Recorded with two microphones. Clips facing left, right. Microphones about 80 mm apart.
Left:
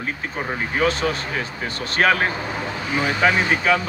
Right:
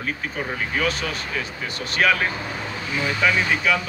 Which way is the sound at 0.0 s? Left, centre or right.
Left.